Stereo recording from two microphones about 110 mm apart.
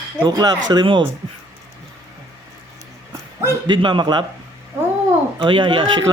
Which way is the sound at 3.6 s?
45° right (ahead or behind).